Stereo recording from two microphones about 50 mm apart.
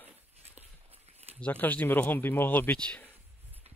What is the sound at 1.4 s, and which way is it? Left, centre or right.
Speech, left.